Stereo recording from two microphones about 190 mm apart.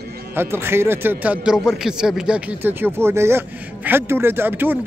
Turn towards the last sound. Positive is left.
turn(degrees=-10)  # may be behind; listen again after turning